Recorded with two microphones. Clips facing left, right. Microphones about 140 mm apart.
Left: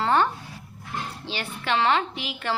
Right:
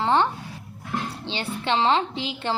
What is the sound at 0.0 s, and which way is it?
Dog, 20° right (ahead or behind).